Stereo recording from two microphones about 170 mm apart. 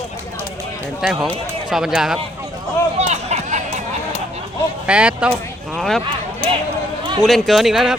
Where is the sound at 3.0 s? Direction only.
40° right (ahead or behind).